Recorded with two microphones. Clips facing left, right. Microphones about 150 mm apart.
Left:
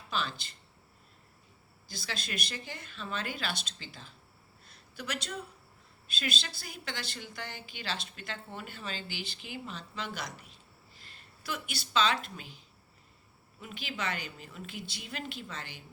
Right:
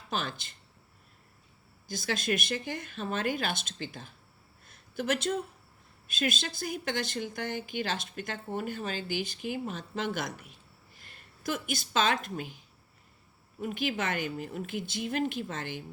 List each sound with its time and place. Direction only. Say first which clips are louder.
0.1 s speech: right 1 dB; 50° right (ahead or behind)
1.9 s speech: right 9 dB; 50° right (ahead or behind)
4.6 s a sound: right 9 dB; 50° right (ahead or behind)
6.1 s speech: right 6 dB; 50° right (ahead or behind)